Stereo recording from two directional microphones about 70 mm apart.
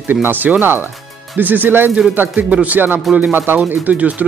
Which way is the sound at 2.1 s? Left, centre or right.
Right.